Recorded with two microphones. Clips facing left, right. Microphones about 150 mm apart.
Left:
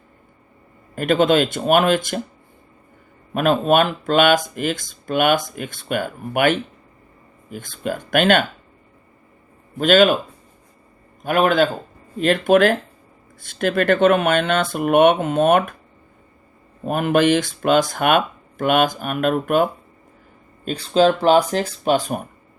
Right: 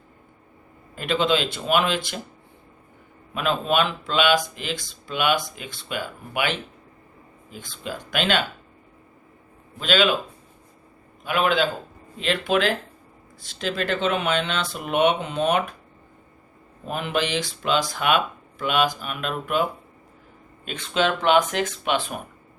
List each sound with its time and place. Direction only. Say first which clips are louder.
0.9 s speech: left 6 dB; 50° left (ahead or behind)
3.3 s speech: left 6 dB; 50° left (ahead or behind)
9.7 s speech: left 7 dB; 50° left (ahead or behind)
11.2 s speech: left 5 dB; 45° left (ahead or behind)
16.8 s speech: left 9 dB; 50° left (ahead or behind)
20.7 s speech: left 8 dB; 35° left (ahead or behind)